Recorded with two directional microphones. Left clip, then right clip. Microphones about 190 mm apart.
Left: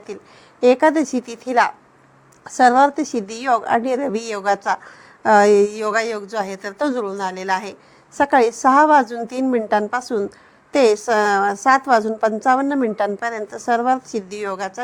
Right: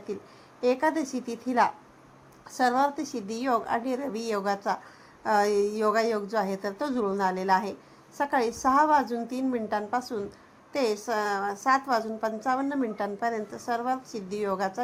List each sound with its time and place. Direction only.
0.6 s a woman's voice: 50° left (ahead or behind)